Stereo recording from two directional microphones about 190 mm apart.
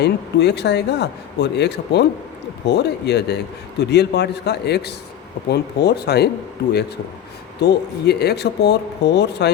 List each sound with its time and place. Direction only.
0.0 s speech: 60° left (ahead or behind)
7.6 s speech: 60° left (ahead or behind)